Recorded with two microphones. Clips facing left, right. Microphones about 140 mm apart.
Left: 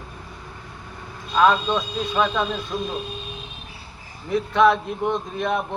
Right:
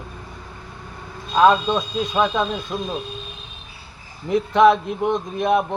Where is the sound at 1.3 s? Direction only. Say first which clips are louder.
Right 3 dB; 20° right (ahead or behind).